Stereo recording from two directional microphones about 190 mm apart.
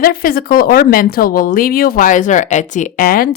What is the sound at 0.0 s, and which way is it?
Speech, 50° left (ahead or behind).